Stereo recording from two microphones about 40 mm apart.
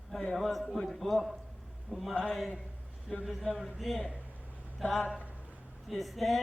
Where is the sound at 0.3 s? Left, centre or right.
Centre.